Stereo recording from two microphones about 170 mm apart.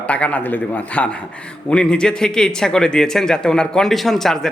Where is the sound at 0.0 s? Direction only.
5° left (ahead or behind).